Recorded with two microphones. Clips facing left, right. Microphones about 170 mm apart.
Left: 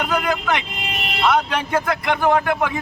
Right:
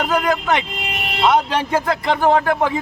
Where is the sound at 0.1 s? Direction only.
30° right (ahead or behind).